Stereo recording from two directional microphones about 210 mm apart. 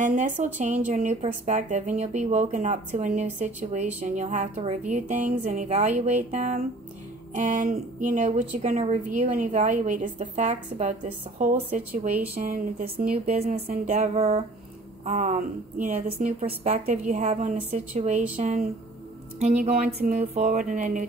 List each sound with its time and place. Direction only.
0.0 s speech: 35° right (ahead or behind)
13.2 s speech: 30° right (ahead or behind)